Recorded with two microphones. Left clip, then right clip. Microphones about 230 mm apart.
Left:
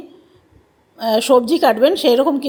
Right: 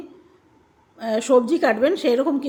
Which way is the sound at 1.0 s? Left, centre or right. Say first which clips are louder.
Left 5 dB; centre.